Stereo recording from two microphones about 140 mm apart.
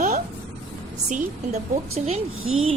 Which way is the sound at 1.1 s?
55° right (ahead or behind).